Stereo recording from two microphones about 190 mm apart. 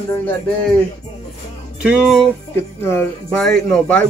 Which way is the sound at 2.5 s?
10° left (ahead or behind).